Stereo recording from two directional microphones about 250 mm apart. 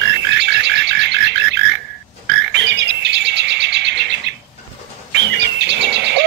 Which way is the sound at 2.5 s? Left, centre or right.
Right.